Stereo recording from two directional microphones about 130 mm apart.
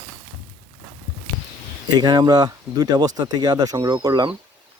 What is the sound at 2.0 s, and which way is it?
Speech, 30° right (ahead or behind).